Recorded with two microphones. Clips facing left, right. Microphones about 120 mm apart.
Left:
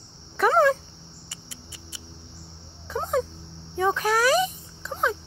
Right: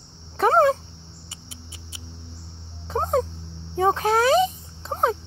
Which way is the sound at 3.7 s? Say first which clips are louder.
Right 3 dB; 30° right (ahead or behind).